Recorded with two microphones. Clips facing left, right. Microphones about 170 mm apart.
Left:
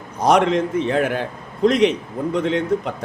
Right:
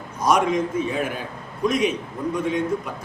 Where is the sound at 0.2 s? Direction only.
65° left (ahead or behind).